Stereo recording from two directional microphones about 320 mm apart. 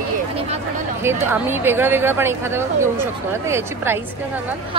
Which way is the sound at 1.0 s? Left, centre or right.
Centre.